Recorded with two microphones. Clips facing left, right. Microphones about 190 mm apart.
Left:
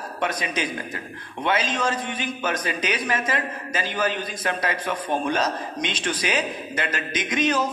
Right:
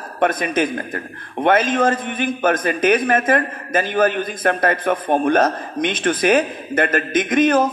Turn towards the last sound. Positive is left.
turn(degrees=-50)  # may be behind; listen again after turning